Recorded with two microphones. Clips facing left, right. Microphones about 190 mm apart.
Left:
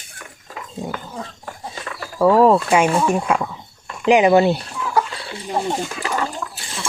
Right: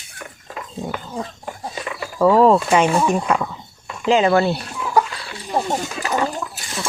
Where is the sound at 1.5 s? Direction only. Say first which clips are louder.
Right 3 dB; 15° right (ahead or behind).